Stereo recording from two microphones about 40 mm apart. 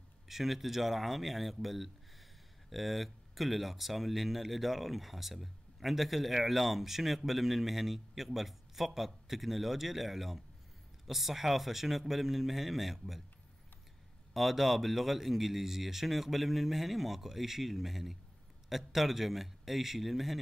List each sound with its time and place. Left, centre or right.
0.3 s speech: centre
14.3 s speech: centre